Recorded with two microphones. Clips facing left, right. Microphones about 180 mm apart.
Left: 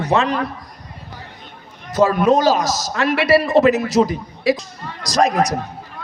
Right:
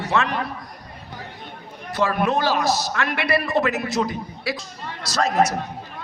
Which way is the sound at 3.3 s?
20° left (ahead or behind).